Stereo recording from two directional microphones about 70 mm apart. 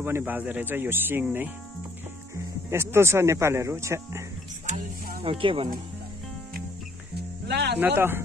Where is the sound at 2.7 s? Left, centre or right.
Right.